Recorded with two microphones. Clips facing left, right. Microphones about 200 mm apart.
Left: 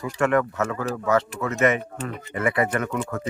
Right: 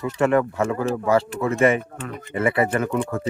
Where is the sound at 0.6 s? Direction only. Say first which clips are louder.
Right 4 dB; 25° right (ahead or behind).